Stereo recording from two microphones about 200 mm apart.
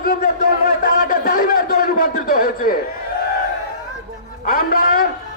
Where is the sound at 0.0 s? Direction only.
50° left (ahead or behind).